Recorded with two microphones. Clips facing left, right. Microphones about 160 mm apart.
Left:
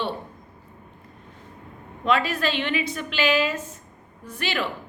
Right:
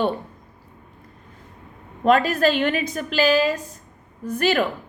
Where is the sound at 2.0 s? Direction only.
45° right (ahead or behind).